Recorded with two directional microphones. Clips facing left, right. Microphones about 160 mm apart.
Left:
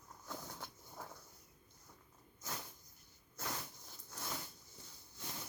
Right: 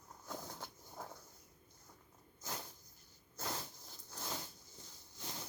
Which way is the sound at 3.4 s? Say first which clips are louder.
Right 1 dB; 30° right (ahead or behind).